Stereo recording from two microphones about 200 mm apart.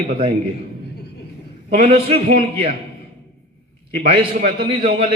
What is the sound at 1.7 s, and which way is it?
Speech, 30° right (ahead or behind).